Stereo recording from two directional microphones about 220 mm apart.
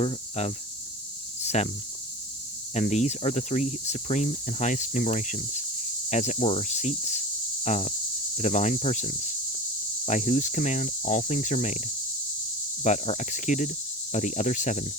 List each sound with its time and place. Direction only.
0.0 s speech: 30° left (ahead or behind)
1.4 s cricket: 30° left (ahead or behind)
2.7 s speech: 30° left (ahead or behind)
12.8 s speech: 30° left (ahead or behind)